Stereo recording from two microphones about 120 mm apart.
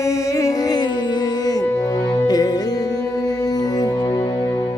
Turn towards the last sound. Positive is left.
turn(degrees=35)  # may be behind; listen again after turning